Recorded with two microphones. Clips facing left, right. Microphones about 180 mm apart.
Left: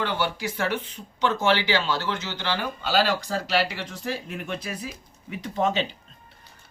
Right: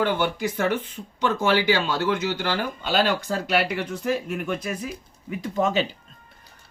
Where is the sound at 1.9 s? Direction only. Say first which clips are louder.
Right 4 dB; 50° right (ahead or behind).